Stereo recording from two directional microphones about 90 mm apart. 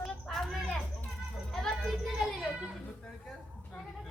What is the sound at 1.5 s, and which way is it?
Music, 5° left (ahead or behind).